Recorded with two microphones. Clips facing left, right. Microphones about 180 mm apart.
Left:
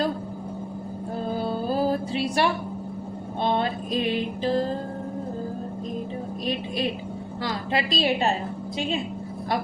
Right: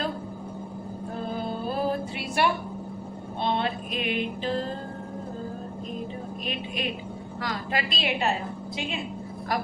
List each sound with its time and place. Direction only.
1.4 s music: 35° left (ahead or behind)
3.6 s music: 35° left (ahead or behind)
6.4 s a sound: 35° left (ahead or behind)
7.4 s a woman's voice: 30° left (ahead or behind)